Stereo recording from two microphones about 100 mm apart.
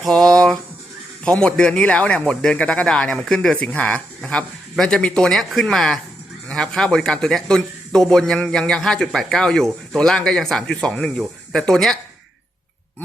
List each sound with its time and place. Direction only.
0.0 s a man's voice: 5° left (ahead or behind)